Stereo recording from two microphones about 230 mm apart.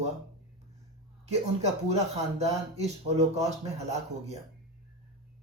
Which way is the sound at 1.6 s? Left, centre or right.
Right.